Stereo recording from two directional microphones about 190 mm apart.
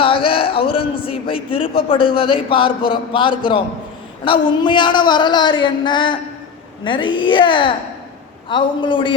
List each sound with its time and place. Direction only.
0.0 s a man's voice: 30° left (ahead or behind)